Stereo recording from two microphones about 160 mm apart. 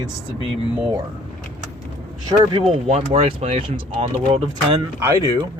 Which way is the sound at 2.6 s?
40° right (ahead or behind).